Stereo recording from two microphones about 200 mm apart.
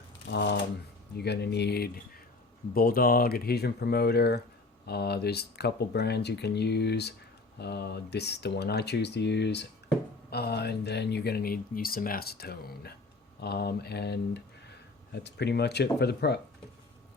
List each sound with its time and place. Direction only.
0.3 s speech: 55° left (ahead or behind)